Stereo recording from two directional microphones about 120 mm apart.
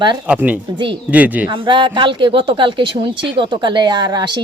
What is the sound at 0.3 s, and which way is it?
Speech, 15° right (ahead or behind).